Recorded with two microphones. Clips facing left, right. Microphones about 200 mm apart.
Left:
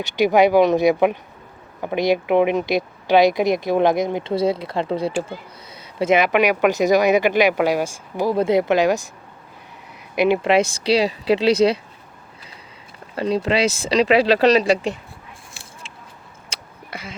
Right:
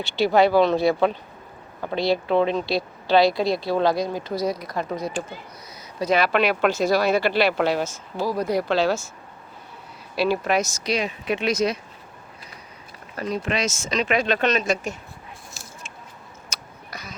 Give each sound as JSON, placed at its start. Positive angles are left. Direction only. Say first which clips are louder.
{"t": 0.2, "sound": "speech", "louder": "left 3 dB", "side_deg": 15}
{"t": 10.2, "sound": "speech", "louder": "left 5 dB", "side_deg": 20}
{"t": 13.1, "sound": "speech", "louder": "left 6 dB", "side_deg": 30}
{"t": 16.5, "sound": "a sound", "louder": "left 2 dB", "side_deg": 30}
{"t": 16.9, "sound": "speech", "louder": "left 5 dB", "side_deg": 25}